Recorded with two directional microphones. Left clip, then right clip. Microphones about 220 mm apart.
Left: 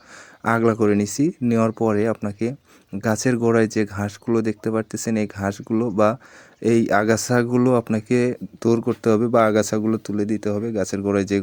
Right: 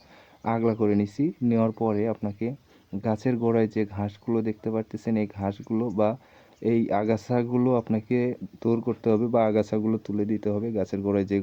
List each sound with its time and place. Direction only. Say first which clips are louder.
0.4 s speech: left 6 dB; 25° left (ahead or behind)